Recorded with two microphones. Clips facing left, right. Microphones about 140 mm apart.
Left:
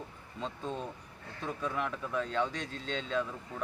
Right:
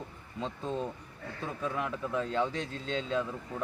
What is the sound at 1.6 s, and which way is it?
Speech, 15° right (ahead or behind).